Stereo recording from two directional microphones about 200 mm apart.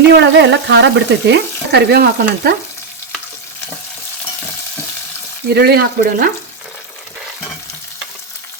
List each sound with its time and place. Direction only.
0.1 s frying: 60° right (ahead or behind)
5.5 s speech: 50° right (ahead or behind)